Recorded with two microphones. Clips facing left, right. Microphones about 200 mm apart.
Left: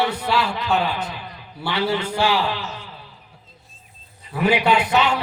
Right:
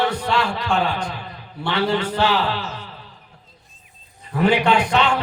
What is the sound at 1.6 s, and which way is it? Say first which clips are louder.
Speech: right 2 dB; 5° left (ahead or behind).